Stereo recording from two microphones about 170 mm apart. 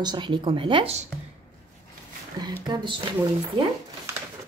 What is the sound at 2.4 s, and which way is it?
Speech, 25° right (ahead or behind).